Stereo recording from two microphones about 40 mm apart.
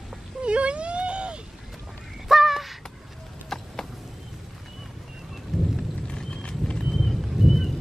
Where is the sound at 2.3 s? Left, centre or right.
Centre.